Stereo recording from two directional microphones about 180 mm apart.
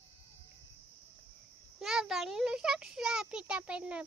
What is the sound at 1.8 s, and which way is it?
A child's voice, 5° right (ahead or behind).